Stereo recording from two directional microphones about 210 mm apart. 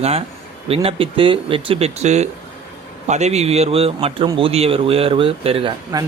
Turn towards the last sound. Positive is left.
turn(degrees=-20)  # may be behind; listen again after turning